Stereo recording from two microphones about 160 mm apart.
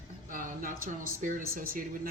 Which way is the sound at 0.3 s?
60° right (ahead or behind).